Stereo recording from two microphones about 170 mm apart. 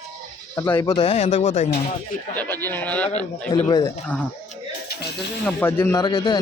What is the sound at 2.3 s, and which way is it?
Speech, 10° left (ahead or behind).